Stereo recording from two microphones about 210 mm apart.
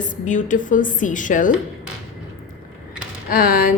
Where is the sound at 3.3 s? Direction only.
45° left (ahead or behind).